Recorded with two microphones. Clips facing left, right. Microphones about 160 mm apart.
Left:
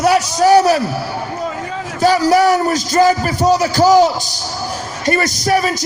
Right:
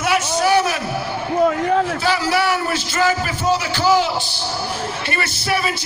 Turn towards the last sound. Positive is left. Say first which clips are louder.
# left 6 dB
turn(degrees=40)  # may be behind; listen again after turning